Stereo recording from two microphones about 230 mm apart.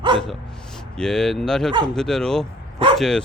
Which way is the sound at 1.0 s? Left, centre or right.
Centre.